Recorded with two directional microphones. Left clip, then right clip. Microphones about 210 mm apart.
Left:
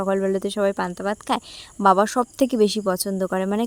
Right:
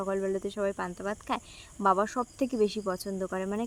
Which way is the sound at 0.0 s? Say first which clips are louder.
Left 9 dB; 45° left (ahead or behind).